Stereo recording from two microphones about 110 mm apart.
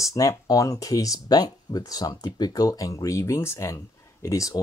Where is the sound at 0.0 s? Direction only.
30° left (ahead or behind).